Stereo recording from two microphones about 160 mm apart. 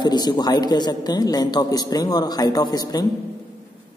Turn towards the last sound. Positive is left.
turn(degrees=25)  # may be behind; listen again after turning